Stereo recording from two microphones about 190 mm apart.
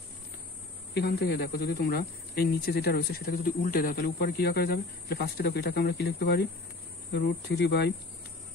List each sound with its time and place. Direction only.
0.9 s speech: 60° left (ahead or behind)